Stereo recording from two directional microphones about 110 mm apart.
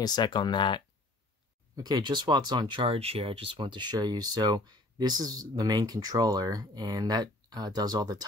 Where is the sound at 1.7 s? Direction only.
35° right (ahead or behind).